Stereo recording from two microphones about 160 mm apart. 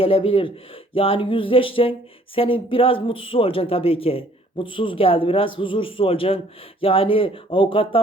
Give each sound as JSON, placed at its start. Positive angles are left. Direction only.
{"t": 0.0, "sound": "speech", "side_deg": 35}